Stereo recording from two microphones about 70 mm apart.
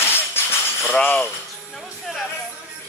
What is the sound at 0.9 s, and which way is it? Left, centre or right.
Speech, left.